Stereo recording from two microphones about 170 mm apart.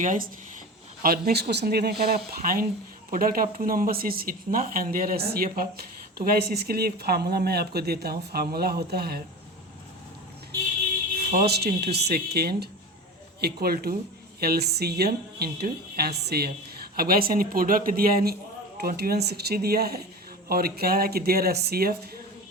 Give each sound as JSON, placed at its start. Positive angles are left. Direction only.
{"t": 0.0, "sound": "speech", "side_deg": -50}
{"t": 1.0, "sound": "speech", "side_deg": -60}
{"t": 11.3, "sound": "speech", "side_deg": -70}
{"t": 17.0, "sound": "speech", "side_deg": -60}